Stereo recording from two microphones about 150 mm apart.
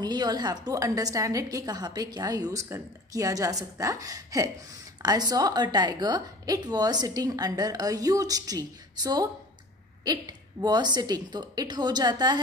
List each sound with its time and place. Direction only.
0.0 s a woman's voice: 30° right (ahead or behind)